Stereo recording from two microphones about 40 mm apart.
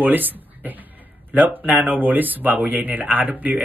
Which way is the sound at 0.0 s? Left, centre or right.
Right.